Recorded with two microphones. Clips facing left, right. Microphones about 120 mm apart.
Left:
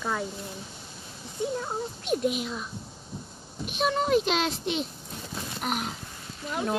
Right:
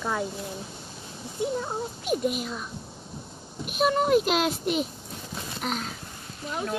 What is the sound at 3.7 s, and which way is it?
Speech, 5° right (ahead or behind).